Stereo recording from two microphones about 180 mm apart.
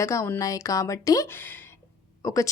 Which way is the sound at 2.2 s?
15° left (ahead or behind).